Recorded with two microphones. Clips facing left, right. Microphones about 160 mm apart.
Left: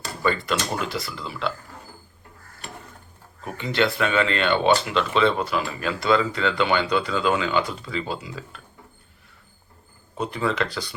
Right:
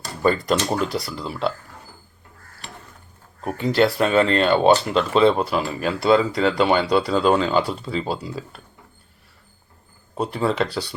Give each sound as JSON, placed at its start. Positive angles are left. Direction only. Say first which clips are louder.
{"t": 0.2, "sound": "speech", "louder": "right 5 dB", "side_deg": -40}
{"t": 0.9, "sound": "speech", "louder": "right 3 dB", "side_deg": 0}
{"t": 1.1, "sound": "speech", "louder": "right 4 dB", "side_deg": -35}
{"t": 3.9, "sound": "speech", "louder": "right 5 dB", "side_deg": -40}
{"t": 10.2, "sound": "speech", "louder": "right 3 dB", "side_deg": -35}